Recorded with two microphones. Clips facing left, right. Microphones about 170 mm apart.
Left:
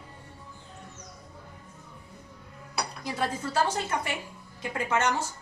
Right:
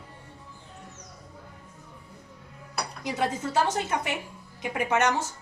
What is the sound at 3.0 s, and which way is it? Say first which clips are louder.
A woman's voice: right 4 dB; 20° right (ahead or behind).